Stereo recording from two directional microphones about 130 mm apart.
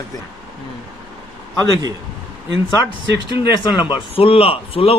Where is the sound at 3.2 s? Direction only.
35° left (ahead or behind).